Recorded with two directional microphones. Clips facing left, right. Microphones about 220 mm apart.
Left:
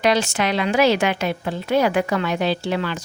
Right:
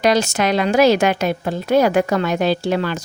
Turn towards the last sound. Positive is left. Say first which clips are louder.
# right 4 dB
turn(degrees=-45)  # may be behind; listen again after turning